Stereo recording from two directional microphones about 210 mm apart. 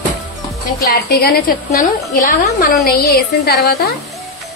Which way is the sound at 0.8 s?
45° left (ahead or behind).